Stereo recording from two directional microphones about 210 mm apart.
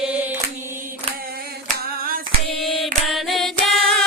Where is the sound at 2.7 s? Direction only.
Centre (ahead or behind).